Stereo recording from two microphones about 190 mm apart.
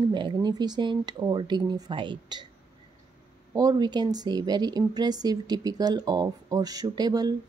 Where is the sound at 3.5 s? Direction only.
20° right (ahead or behind).